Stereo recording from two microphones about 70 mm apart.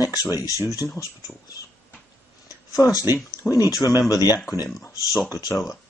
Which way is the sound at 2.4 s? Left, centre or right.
Left.